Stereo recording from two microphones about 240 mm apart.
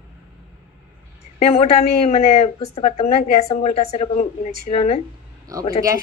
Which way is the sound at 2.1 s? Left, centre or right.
Left.